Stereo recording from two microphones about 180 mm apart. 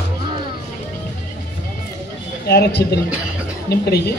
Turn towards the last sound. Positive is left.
turn(degrees=65)  # may be behind; listen again after turning